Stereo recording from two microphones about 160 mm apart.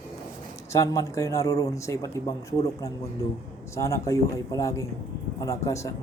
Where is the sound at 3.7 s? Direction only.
20° left (ahead or behind).